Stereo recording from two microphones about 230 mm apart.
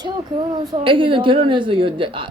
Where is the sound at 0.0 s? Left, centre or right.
Centre.